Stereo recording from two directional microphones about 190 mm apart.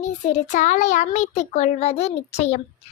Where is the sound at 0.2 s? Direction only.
40° left (ahead or behind).